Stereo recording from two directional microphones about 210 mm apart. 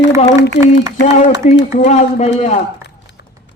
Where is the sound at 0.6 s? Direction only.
55° left (ahead or behind).